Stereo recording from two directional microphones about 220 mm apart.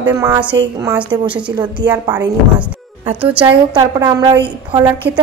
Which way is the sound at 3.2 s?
5° right (ahead or behind).